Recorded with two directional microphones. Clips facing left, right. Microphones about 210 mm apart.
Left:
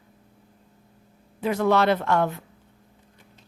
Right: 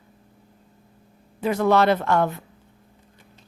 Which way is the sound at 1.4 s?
40° right (ahead or behind).